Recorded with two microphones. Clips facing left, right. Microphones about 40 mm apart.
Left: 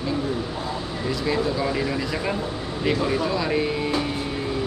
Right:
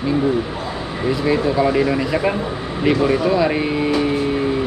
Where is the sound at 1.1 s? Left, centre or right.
Right.